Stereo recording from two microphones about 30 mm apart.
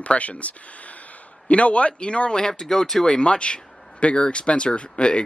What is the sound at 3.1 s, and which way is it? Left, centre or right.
Speech, left.